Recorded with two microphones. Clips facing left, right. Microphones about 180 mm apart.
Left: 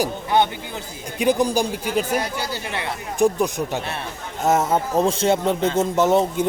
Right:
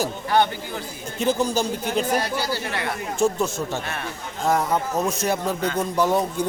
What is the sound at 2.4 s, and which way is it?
Speech, 20° left (ahead or behind).